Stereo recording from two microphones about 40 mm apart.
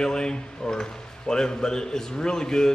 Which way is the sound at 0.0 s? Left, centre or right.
Centre.